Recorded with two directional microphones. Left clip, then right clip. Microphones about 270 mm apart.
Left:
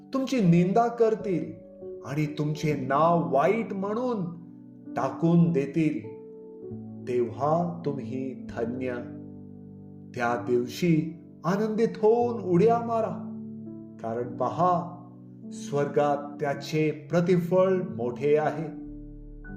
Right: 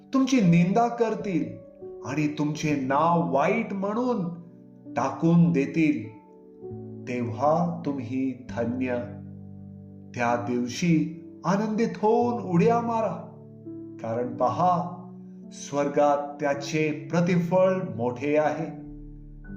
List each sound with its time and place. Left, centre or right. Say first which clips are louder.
0.1 s music: right 3 dB; left
7.0 s music: right 1 dB; left
10.2 s music: even; left